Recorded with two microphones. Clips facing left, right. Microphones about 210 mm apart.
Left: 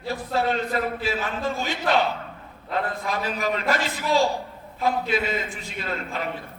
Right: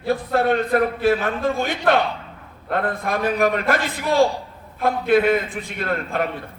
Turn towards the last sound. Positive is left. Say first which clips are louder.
# right 6 dB
turn(degrees=-55)  # may be behind; listen again after turning